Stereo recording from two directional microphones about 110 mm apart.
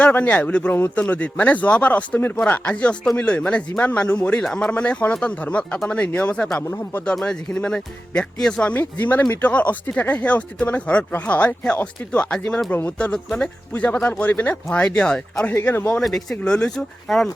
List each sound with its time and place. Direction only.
0.0 s speech: 15° left (ahead or behind)
6.6 s speech: 20° left (ahead or behind)
7.0 s speech: 10° left (ahead or behind)
15.5 s speech: 20° left (ahead or behind)
16.0 s speech: 5° left (ahead or behind)